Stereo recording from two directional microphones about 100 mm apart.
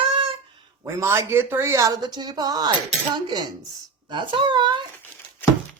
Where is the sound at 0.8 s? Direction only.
25° right (ahead or behind); by 4.7 s 50° right (ahead or behind).